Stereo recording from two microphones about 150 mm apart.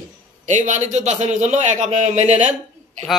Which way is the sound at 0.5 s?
55° right (ahead or behind).